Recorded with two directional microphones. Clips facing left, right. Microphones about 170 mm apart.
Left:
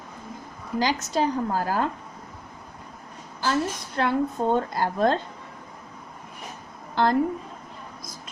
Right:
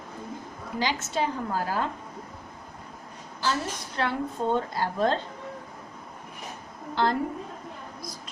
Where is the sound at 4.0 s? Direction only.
45° left (ahead or behind).